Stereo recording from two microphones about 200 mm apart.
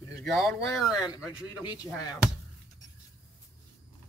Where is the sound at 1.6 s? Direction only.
20° left (ahead or behind).